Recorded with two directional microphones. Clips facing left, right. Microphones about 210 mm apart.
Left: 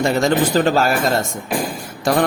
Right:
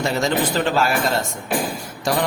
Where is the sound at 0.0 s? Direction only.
50° left (ahead or behind).